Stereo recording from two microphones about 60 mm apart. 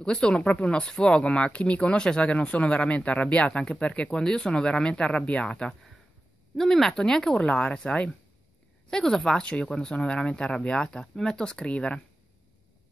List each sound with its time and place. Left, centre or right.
0.0 s speech: centre
6.5 s speech: centre